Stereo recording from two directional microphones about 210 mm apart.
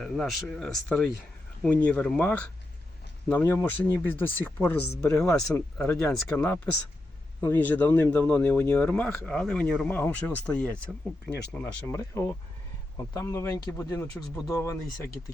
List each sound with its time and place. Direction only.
0.0 s speech: centre (ahead or behind)
11.3 s speech: 55° left (ahead or behind)
11.5 s speech: 10° left (ahead or behind)